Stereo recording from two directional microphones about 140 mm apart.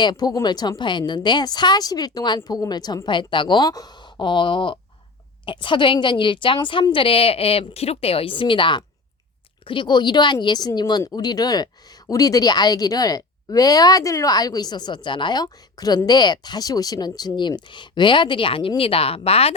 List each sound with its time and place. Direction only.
0.0 s a woman's voice: 30° left (ahead or behind); by 19.5 s 45° left (ahead or behind)